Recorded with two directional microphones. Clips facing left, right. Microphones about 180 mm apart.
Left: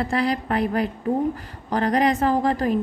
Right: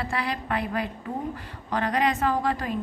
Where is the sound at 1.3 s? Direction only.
40° left (ahead or behind).